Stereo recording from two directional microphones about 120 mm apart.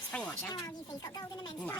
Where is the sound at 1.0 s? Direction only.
35° left (ahead or behind).